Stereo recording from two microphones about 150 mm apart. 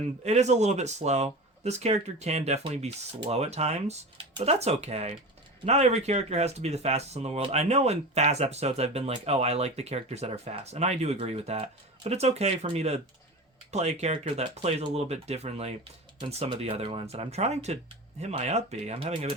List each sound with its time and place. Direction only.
0.3 s speech: 50° right (ahead or behind)